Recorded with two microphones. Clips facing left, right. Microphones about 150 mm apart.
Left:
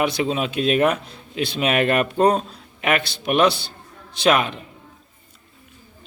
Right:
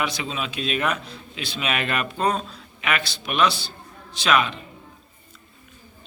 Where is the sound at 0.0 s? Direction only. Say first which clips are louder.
Left 7 dB; 50° left (ahead or behind).